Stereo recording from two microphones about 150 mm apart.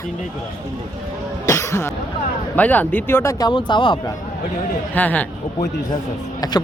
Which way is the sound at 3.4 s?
30° left (ahead or behind).